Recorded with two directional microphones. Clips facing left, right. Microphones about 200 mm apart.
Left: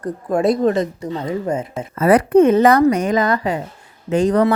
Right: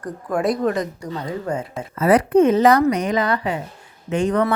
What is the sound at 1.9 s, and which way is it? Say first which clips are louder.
A woman's voice: left 3 dB; 55° left (ahead or behind).